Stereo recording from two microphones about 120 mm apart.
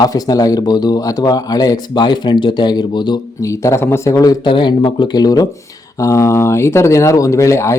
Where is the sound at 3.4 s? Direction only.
25° left (ahead or behind).